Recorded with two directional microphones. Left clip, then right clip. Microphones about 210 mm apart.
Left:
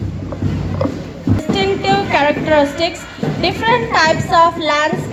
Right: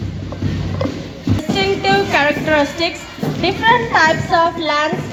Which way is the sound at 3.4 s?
40° left (ahead or behind).